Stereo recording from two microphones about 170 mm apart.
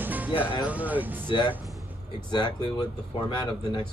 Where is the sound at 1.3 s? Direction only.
25° left (ahead or behind).